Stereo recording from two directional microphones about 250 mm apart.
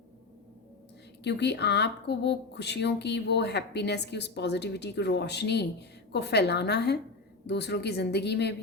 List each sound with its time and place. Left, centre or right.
1.2 s a woman's voice: left